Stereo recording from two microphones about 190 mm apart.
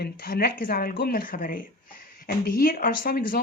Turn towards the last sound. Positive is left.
turn(degrees=50)  # may be behind; listen again after turning